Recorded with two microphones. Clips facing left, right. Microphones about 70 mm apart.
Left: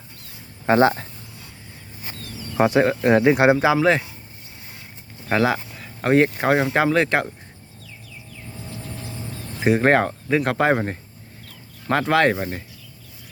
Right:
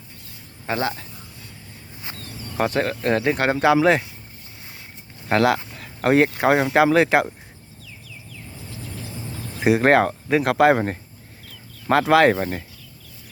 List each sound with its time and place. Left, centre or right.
0.6 s speech: left
2.6 s speech: centre
3.8 s speech: centre
5.3 s speech: centre
9.6 s speech: centre